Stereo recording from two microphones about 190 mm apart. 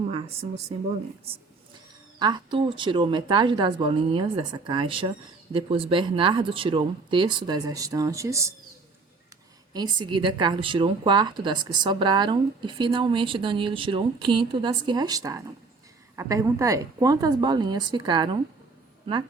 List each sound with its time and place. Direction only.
2.1 s speech: 20° right (ahead or behind)
9.7 s speech: 25° right (ahead or behind)